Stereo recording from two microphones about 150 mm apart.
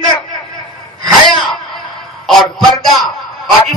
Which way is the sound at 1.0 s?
Centre (ahead or behind).